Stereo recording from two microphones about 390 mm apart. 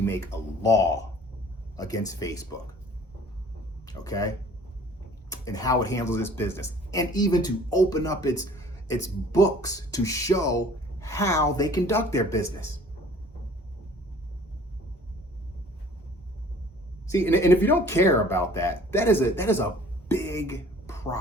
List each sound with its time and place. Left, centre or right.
0.0 s speech: centre
3.8 s speech: centre
17.1 s speech: centre